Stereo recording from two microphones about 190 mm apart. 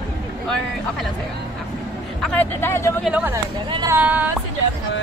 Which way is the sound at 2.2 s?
5° left (ahead or behind).